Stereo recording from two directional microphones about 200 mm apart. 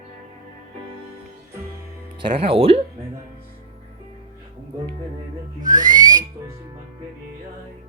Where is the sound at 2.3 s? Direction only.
30° right (ahead or behind).